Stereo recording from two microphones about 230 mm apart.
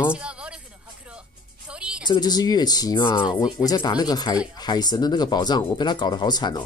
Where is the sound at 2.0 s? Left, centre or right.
Centre.